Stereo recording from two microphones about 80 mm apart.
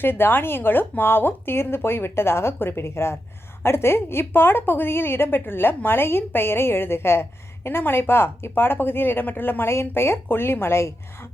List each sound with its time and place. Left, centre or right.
0.0 s a woman's voice: left